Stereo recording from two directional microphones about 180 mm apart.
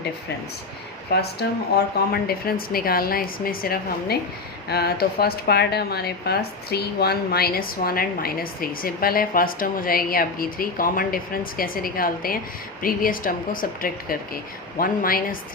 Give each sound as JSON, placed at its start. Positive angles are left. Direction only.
{"t": 1.1, "sound": "speech", "side_deg": 60}